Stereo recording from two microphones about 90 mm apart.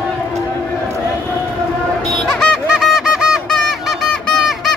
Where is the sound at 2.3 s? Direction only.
10° left (ahead or behind).